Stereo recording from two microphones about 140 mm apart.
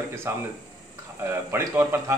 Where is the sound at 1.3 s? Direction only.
15° right (ahead or behind).